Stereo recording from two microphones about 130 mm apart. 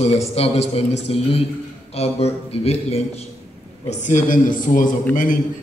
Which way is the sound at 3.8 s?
70° left (ahead or behind).